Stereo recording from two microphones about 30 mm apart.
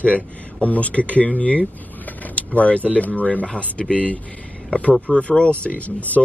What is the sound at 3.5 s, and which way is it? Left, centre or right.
Speech, left.